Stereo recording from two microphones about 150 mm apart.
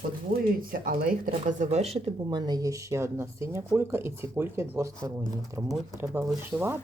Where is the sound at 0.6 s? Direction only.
65° right (ahead or behind); by 2.4 s 40° right (ahead or behind).